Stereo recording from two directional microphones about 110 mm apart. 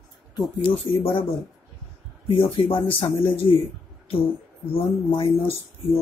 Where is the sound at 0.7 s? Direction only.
50° left (ahead or behind).